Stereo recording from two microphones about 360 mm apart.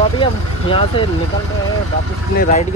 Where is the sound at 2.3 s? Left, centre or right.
Left.